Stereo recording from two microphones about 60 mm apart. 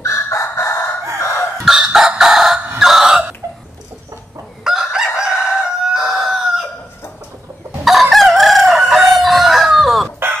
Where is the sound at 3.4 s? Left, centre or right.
Right.